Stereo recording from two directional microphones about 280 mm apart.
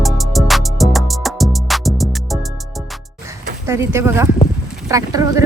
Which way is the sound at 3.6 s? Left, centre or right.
Centre.